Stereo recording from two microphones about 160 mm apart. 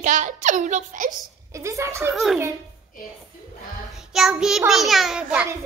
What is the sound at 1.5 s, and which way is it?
Speech, 20° right (ahead or behind).